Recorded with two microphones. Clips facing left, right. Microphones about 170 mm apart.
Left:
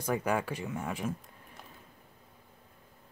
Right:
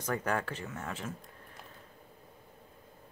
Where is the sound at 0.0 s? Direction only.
10° left (ahead or behind).